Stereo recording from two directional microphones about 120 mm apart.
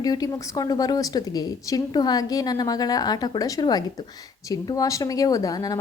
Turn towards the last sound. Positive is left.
turn(degrees=30)  # may be behind; listen again after turning